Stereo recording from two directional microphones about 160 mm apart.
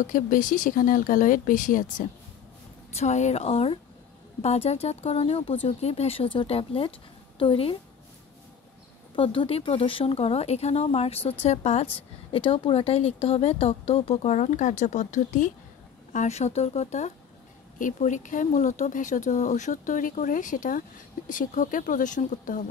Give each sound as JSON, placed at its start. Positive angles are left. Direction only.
{"t": 0.0, "sound": "speech", "side_deg": 55}
{"t": 3.0, "sound": "a woman's voice", "side_deg": 45}
{"t": 9.1, "sound": "a woman's voice", "side_deg": 35}